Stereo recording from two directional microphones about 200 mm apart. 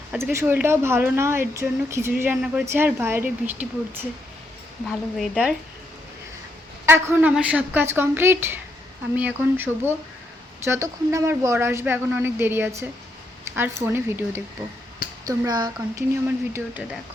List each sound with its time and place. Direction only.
0.1 s speech: 10° right (ahead or behind)
4.9 s a woman's voice: centre (ahead or behind)
6.8 s a woman's voice: 10° right (ahead or behind)
16.2 s speech: 10° right (ahead or behind)